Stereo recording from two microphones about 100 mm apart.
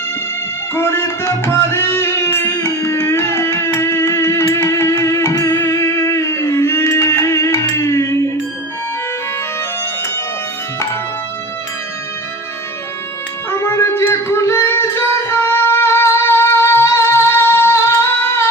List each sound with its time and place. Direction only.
0.7 s music: 25° left (ahead or behind)
13.5 s singing: 25° left (ahead or behind)